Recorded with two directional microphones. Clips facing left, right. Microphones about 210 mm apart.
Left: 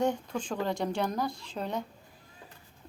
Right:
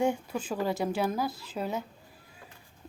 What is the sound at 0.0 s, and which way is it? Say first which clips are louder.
Speech: right 1 dB; 10° right (ahead or behind).